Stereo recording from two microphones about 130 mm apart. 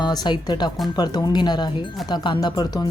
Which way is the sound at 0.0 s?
30° left (ahead or behind).